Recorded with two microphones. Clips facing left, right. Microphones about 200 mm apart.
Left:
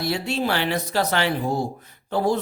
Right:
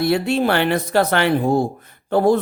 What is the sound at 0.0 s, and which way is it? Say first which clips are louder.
Speech: right 7 dB; 55° right (ahead or behind).